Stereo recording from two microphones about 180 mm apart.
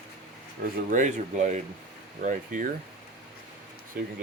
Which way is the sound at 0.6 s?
50° right (ahead or behind).